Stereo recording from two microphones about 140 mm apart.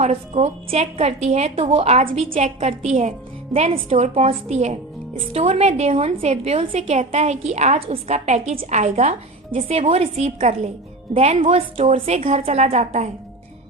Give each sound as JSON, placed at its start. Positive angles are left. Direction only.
{"t": 0.0, "sound": "a woman's voice", "side_deg": -50}